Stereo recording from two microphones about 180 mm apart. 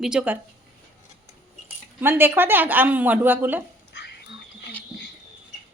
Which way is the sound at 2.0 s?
10° right (ahead or behind).